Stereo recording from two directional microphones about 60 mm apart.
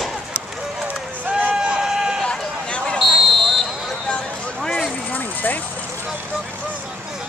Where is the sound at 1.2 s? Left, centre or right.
Right.